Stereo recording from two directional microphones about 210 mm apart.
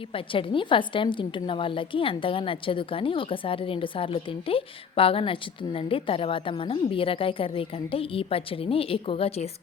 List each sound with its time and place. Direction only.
0.1 s a woman's voice: 25° left (ahead or behind)